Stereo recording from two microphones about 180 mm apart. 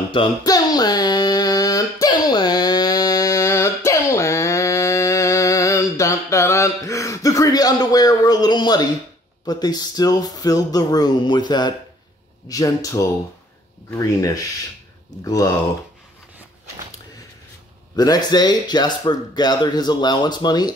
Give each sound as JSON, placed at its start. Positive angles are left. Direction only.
{"t": 0.1, "sound": "a sound", "side_deg": 25}
{"t": 9.5, "sound": "speech", "side_deg": 20}
{"t": 17.9, "sound": "speech", "side_deg": 20}